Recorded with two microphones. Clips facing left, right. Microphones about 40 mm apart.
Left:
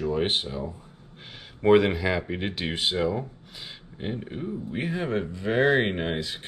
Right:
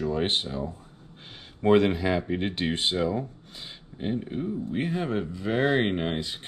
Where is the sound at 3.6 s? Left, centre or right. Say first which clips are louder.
Right 1 dB; centre.